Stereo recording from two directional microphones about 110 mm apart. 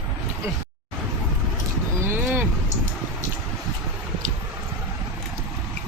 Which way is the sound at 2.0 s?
25° right (ahead or behind).